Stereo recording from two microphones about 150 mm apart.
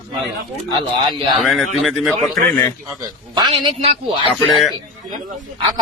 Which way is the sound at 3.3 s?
30° right (ahead or behind).